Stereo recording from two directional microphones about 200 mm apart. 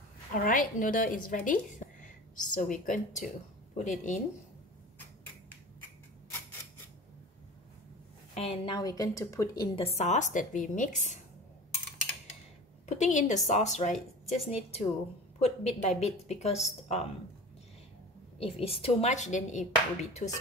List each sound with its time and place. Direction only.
0.4 s a woman's voice: 45° left (ahead or behind)
8.4 s speech: 25° left (ahead or behind)
9.8 s speech: 30° left (ahead or behind)
12.8 s a woman's voice: 35° left (ahead or behind)
13.9 s a woman's voice: centre (ahead or behind)
14.5 s speech: 30° left (ahead or behind)
18.4 s speech: 30° left (ahead or behind)